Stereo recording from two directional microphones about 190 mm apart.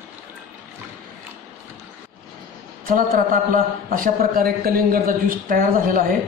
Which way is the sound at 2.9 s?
45° right (ahead or behind).